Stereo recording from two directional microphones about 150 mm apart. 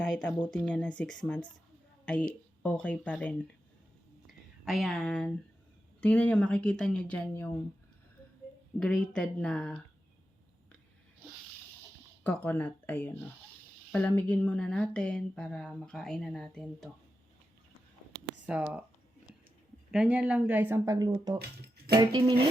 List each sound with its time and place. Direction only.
0.0 s speech: 5° left (ahead or behind)
2.6 s speech: 10° left (ahead or behind)
4.6 s speech: centre (ahead or behind)
8.8 s speech: 5° left (ahead or behind)
12.2 s speech: 15° left (ahead or behind)
18.4 s speech: 10° right (ahead or behind)
19.9 s speech: 5° right (ahead or behind); by 21.3 s 25° right (ahead or behind)
21.3 s speech: 90° right
21.9 s speech: 25° right (ahead or behind)